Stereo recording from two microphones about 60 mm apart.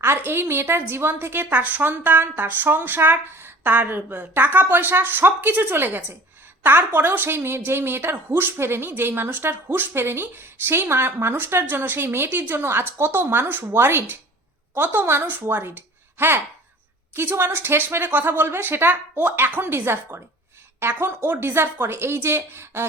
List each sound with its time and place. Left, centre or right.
0.0 s a woman's voice: right